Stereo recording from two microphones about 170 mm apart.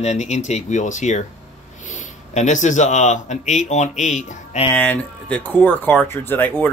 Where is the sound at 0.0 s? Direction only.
40° left (ahead or behind).